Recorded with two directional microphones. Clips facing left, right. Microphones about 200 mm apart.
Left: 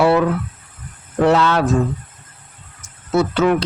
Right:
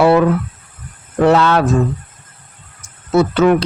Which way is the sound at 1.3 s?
60° right (ahead or behind).